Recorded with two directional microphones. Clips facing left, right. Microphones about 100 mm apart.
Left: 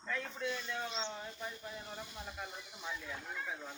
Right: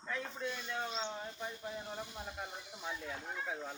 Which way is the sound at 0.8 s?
40° right (ahead or behind).